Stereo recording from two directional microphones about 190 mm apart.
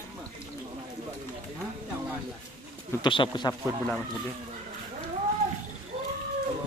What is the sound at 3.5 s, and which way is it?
Speech, centre (ahead or behind).